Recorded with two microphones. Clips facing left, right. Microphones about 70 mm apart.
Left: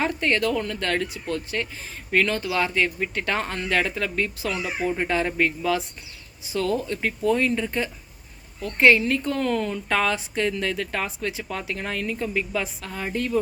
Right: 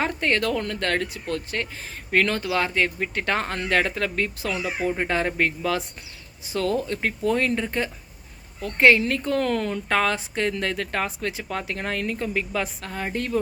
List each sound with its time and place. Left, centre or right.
0.0 s a woman's voice: right
7.6 s a woman's voice: right